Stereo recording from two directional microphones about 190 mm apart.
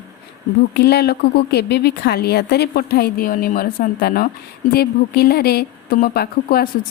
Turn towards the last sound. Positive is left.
turn(degrees=55)  # may be behind; listen again after turning